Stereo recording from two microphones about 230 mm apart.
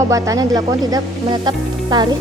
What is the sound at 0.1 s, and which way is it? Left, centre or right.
A woman's voice, centre.